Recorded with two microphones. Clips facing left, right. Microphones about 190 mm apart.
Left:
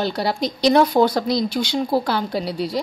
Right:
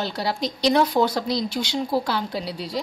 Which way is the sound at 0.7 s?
50° left (ahead or behind).